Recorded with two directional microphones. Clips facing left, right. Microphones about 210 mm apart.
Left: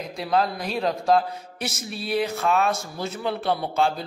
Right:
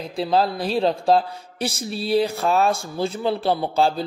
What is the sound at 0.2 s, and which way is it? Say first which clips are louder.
A man's voice: right 3 dB; 30° right (ahead or behind).